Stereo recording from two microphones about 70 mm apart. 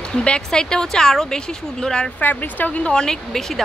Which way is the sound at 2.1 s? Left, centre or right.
Left.